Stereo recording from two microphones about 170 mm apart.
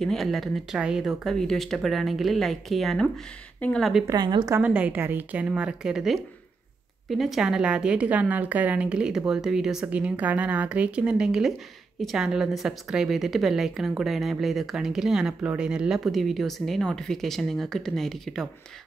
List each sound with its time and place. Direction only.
0.0 s a woman's voice: centre (ahead or behind)
4.1 s a woman's voice: 25° right (ahead or behind)
4.6 s a woman's voice: 10° right (ahead or behind)